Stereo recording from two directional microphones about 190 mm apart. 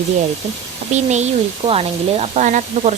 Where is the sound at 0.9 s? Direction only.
35° right (ahead or behind).